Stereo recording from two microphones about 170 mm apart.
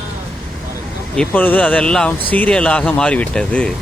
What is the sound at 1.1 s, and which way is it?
A man's voice, 5° left (ahead or behind).